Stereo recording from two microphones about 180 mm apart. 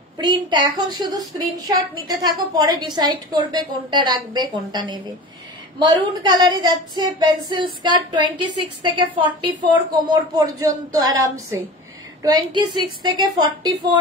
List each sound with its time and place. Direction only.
0.2 s a woman's voice: 25° right (ahead or behind)